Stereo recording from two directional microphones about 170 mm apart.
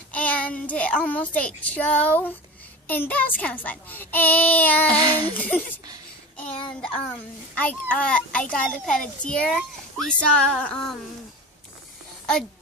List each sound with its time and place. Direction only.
0.1 s a child's voice: 10° left (ahead or behind)
5.0 s speech: 25° right (ahead or behind)
5.3 s a child's voice: 10° left (ahead or behind)
7.5 s a child's voice: 10° left (ahead or behind)